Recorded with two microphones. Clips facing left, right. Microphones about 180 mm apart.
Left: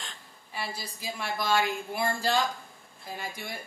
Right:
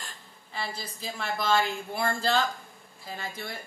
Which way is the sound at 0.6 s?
10° left (ahead or behind).